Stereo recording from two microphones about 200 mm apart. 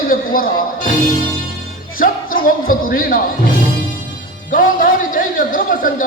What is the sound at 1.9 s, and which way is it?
Speech, 45° left (ahead or behind).